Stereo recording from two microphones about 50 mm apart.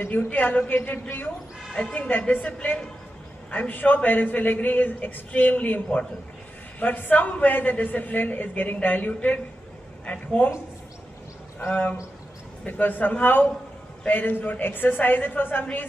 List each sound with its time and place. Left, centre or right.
0.0 s a man's voice: left
12.6 s a man's voice: left